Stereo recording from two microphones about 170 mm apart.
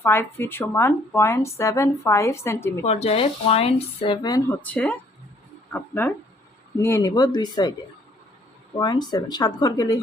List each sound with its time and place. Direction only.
0.0 s speech: 15° left (ahead or behind)
2.8 s speech: 35° left (ahead or behind)
4.6 s speech: 5° left (ahead or behind); by 7.7 s 25° left (ahead or behind)
8.8 s speech: 25° left (ahead or behind)